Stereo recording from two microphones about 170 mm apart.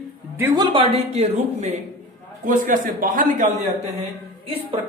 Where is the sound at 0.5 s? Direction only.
30° right (ahead or behind).